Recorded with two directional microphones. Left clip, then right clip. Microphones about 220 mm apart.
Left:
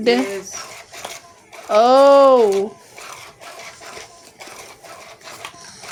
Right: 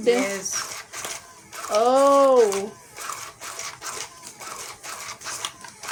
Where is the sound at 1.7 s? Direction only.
50° left (ahead or behind).